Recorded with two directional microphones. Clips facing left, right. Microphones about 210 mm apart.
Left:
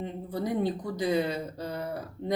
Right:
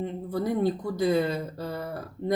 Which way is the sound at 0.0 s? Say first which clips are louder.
Right 3 dB; 15° left (ahead or behind).